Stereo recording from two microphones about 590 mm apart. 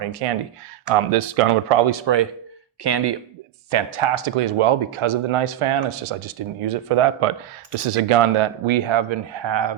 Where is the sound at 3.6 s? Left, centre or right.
Right.